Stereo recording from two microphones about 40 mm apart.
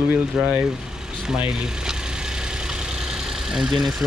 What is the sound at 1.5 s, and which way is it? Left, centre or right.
Vehicle, centre.